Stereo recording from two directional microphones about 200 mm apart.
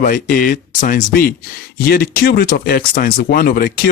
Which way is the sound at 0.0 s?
40° left (ahead or behind).